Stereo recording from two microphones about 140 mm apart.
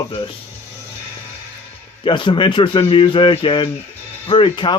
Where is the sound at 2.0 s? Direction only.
35° left (ahead or behind).